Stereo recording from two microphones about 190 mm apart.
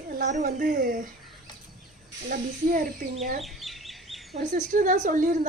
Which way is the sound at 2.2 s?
45° right (ahead or behind).